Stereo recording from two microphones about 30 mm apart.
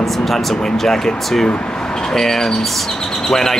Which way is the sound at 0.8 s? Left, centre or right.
Centre.